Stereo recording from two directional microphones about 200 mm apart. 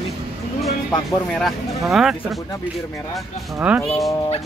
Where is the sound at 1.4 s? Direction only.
Centre (ahead or behind).